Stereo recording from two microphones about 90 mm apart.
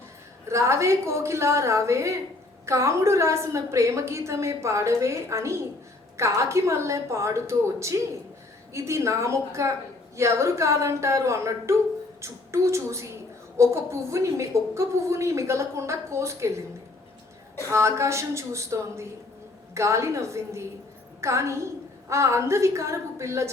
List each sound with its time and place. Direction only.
0.4 s a woman's voice: 35° right (ahead or behind)
17.7 s a woman's voice: 30° right (ahead or behind)